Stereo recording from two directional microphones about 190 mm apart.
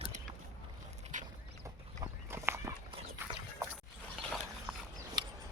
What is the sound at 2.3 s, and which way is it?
Walk, 15° right (ahead or behind).